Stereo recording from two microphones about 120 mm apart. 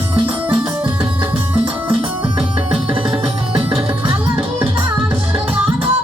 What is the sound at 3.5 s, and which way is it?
Music, 50° right (ahead or behind).